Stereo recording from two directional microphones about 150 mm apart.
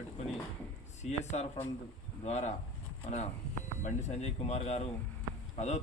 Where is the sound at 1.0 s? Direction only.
50° left (ahead or behind).